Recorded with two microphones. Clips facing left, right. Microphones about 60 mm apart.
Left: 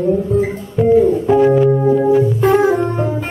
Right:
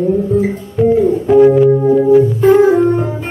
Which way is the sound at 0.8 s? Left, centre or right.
Centre.